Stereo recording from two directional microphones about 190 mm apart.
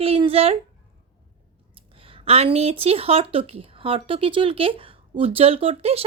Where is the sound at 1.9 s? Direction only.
30° right (ahead or behind).